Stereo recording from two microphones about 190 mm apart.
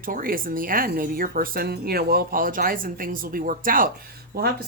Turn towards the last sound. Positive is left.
turn(degrees=-55)  # may be behind; listen again after turning